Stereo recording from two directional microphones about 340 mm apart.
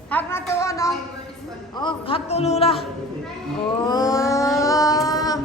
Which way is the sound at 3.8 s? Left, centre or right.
Centre.